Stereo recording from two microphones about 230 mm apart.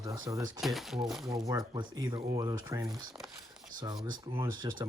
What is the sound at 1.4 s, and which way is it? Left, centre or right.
Speech, centre.